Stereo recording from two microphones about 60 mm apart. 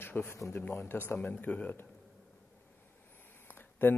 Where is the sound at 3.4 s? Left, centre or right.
Left.